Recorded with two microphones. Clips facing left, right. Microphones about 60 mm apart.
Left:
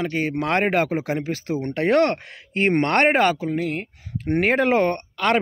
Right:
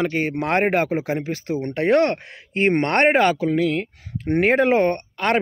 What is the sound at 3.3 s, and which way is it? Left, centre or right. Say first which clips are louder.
Speech: right 5 dB; right.